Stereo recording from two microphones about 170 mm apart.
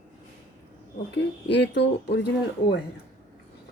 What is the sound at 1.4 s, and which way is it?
Speech, 90° left.